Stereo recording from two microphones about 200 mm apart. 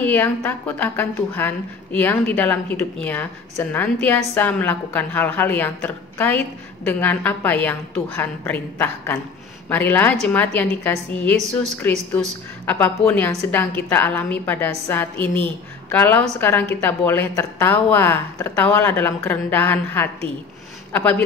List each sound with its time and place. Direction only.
0.0 s a woman's voice: 10° left (ahead or behind)